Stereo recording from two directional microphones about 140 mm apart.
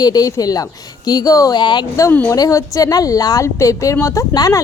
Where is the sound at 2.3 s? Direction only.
25° left (ahead or behind).